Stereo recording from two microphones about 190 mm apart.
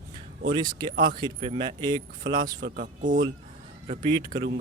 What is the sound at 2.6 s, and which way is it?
Speech, 55° right (ahead or behind).